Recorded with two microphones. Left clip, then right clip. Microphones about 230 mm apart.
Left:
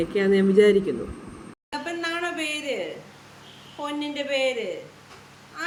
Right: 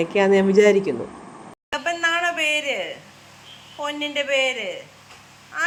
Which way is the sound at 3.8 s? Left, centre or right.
Centre.